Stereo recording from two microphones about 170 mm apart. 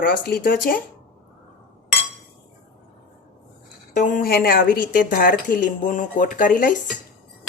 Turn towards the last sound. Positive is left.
turn(degrees=50)  # may be behind; listen again after turning